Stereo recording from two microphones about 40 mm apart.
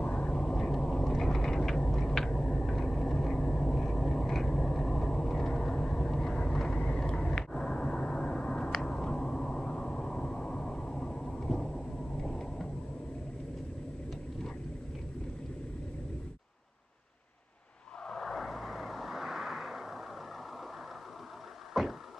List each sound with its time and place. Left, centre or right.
0.0 s vehicle: left
0.4 s vehicle: centre
1.9 s a sound: centre
18.0 s vehicle: centre
21.7 s vehicle: centre